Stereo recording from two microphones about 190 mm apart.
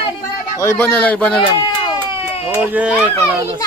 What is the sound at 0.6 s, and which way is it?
Speech, 10° left (ahead or behind).